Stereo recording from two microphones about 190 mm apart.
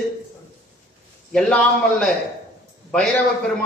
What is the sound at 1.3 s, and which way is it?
Speech, 5° left (ahead or behind).